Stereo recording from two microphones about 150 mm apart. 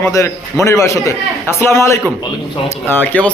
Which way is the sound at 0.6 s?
20° left (ahead or behind).